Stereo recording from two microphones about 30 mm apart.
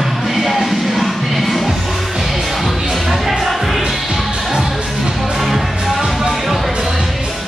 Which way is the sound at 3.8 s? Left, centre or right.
Centre.